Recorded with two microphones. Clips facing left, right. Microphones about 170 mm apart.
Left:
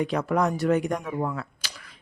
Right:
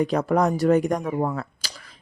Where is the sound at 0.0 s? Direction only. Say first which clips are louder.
Right 3 dB; 40° right (ahead or behind).